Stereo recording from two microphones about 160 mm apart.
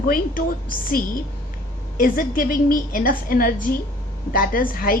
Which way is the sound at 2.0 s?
60° left (ahead or behind).